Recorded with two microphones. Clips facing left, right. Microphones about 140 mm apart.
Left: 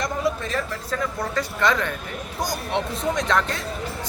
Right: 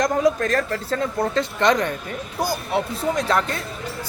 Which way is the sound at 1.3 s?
25° right (ahead or behind).